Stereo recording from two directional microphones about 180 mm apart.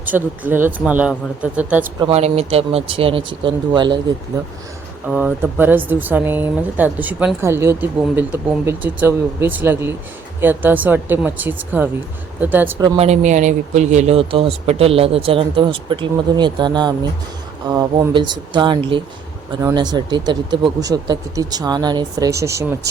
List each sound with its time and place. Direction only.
0.0 s speech: 10° right (ahead or behind)
2.0 s a man's voice: 35° right (ahead or behind)
5.0 s speech: 10° right (ahead or behind)
12.8 s a man's voice: 35° right (ahead or behind); by 22.8 s 15° right (ahead or behind)